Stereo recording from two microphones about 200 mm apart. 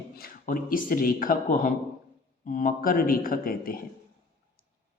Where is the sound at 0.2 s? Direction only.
45° left (ahead or behind).